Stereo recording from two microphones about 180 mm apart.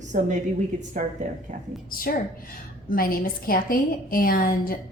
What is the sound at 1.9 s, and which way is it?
A woman's voice, 55° left (ahead or behind).